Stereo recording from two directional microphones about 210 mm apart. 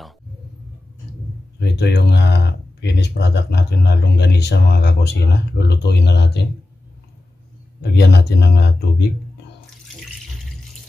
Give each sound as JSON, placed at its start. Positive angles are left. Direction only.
{"t": 1.6, "sound": "speech", "side_deg": 55}
{"t": 7.8, "sound": "speech", "side_deg": 50}